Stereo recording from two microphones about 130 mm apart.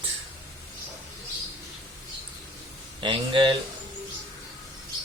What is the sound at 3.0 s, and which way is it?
Speech, 40° right (ahead or behind).